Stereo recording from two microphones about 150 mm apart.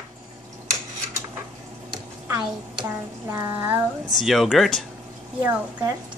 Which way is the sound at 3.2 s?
15° right (ahead or behind).